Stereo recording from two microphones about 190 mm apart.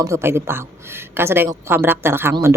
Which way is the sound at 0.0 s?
15° right (ahead or behind).